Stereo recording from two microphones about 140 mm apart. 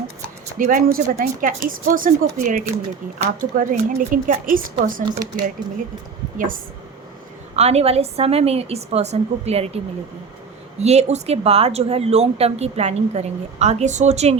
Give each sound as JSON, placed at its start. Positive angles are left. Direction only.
{"t": 0.6, "sound": "speech", "side_deg": -80}
{"t": 3.5, "sound": "speech", "side_deg": -70}
{"t": 5.0, "sound": "speech", "side_deg": -30}
{"t": 6.3, "sound": "speech", "side_deg": -75}
{"t": 7.5, "sound": "speech", "side_deg": -50}
{"t": 10.8, "sound": "speech", "side_deg": -50}